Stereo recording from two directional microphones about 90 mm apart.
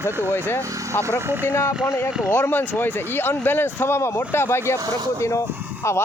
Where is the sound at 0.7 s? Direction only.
35° right (ahead or behind).